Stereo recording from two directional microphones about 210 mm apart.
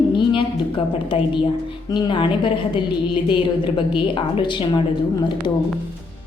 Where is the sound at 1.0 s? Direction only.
25° left (ahead or behind).